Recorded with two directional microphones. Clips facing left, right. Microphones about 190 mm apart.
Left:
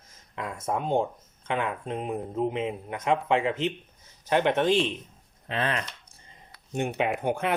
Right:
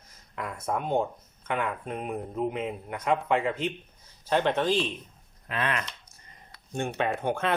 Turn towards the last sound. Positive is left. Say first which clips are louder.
# left 1 dB
turn(degrees=15)  # may be behind; listen again after turning